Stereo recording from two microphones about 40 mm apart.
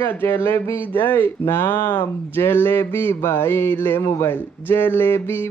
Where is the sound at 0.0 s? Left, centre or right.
Left.